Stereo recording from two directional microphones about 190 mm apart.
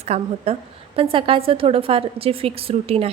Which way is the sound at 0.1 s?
35° right (ahead or behind).